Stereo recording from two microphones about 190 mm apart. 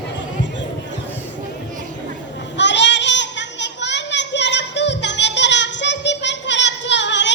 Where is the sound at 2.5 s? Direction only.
70° left (ahead or behind).